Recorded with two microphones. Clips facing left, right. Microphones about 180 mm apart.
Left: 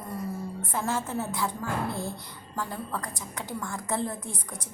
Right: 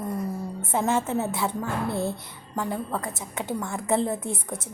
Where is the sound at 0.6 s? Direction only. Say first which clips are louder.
Right 7 dB; 25° right (ahead or behind).